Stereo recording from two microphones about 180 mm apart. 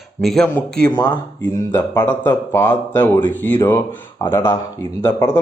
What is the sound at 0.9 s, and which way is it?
Speech, 25° left (ahead or behind).